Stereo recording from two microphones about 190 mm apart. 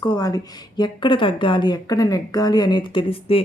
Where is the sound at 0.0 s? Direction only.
20° left (ahead or behind).